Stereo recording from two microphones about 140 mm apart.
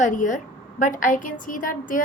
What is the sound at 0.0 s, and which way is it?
A woman's voice, 65° left (ahead or behind).